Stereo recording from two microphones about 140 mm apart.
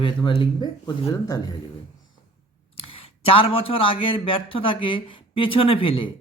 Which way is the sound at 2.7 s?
40° left (ahead or behind).